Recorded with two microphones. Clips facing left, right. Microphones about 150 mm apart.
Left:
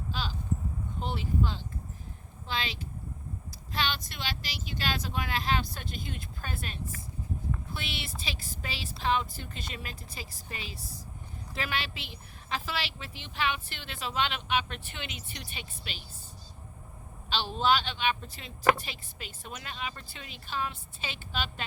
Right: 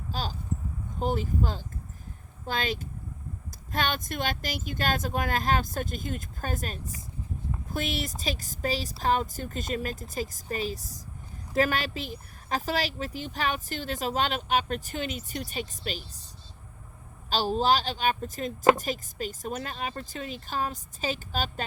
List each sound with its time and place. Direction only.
0.1 s a sound: 40° right (ahead or behind)
0.9 s a woman's voice: 45° right (ahead or behind)
17.2 s a woman's voice: 40° right (ahead or behind)